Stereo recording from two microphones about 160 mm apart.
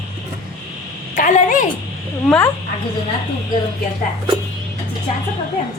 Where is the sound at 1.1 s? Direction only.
50° left (ahead or behind).